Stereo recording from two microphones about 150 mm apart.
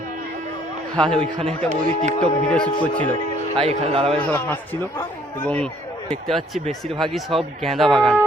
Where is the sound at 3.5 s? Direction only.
40° right (ahead or behind).